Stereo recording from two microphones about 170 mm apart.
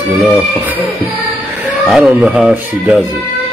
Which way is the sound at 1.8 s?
Centre (ahead or behind).